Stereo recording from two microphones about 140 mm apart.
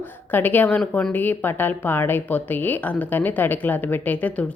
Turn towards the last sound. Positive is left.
turn(degrees=10)  # may be behind; listen again after turning